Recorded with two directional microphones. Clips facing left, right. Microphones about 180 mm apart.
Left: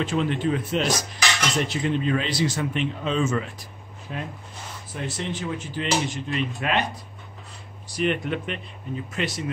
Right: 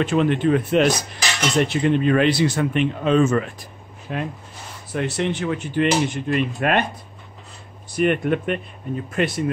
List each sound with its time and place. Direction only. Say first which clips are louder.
0.0 s cutlery: right 5 dB; 60° right (ahead or behind)
7.9 s speech: right 6 dB; 55° right (ahead or behind)
9.1 s cutlery: right 7 dB; 55° right (ahead or behind)